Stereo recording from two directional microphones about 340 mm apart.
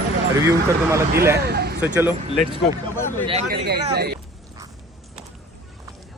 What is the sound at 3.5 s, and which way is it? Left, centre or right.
Speech, right.